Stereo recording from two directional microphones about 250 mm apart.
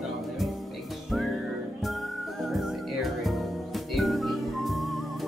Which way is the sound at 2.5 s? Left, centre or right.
Centre.